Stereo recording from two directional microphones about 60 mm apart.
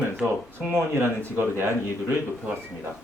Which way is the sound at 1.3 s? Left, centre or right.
Right.